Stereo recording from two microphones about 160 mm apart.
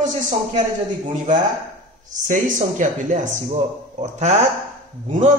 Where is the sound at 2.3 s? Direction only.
50° right (ahead or behind).